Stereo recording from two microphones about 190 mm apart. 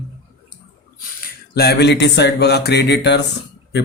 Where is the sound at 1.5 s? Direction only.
60° left (ahead or behind).